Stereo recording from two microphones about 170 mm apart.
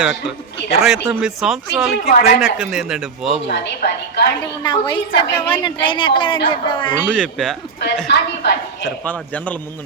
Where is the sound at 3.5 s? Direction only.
75° left (ahead or behind).